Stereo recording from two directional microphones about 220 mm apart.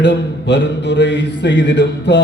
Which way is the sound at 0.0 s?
50° left (ahead or behind).